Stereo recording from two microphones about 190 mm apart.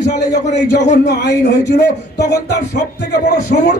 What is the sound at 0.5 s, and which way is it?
A man's voice, 65° left (ahead or behind).